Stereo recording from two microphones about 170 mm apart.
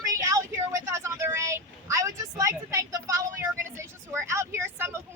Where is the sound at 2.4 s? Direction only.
20° right (ahead or behind).